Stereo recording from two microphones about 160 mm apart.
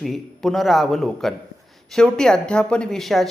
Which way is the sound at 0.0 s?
Centre (ahead or behind).